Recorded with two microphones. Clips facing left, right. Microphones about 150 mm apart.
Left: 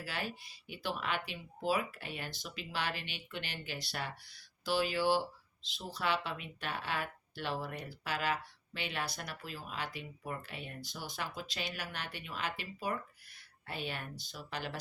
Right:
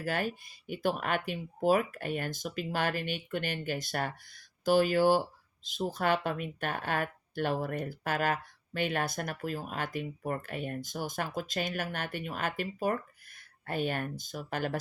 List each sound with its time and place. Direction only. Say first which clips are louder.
0.0 s speech: right 8 dB; 50° right (ahead or behind)